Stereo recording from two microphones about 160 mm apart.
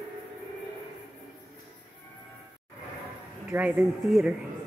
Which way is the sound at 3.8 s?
Centre (ahead or behind).